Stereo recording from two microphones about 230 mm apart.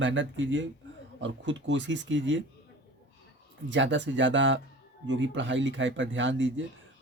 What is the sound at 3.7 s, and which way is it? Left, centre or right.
Speech, right.